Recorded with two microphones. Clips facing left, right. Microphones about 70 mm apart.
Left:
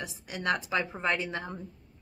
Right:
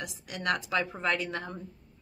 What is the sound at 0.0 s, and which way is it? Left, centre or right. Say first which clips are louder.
Speech: left 1 dB; left.